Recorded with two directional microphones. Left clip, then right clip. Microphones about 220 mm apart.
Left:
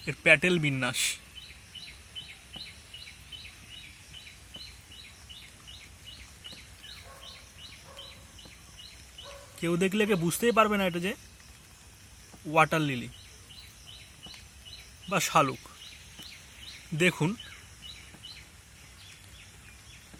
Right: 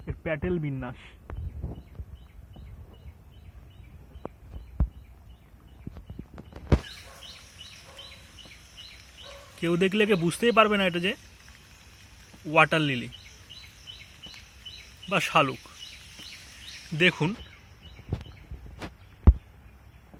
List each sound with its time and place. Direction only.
0.0 s speech: 35° left (ahead or behind)
9.6 s speech: 5° right (ahead or behind)
12.5 s speech: 5° right (ahead or behind)
15.1 s speech: centre (ahead or behind)
17.0 s speech: centre (ahead or behind)